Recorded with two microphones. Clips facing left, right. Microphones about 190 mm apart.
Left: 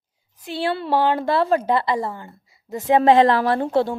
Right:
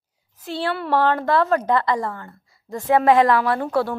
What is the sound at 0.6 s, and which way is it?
A woman's voice, 25° left (ahead or behind).